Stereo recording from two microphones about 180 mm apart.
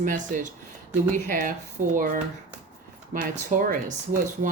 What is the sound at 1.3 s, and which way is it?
Speech, 50° right (ahead or behind).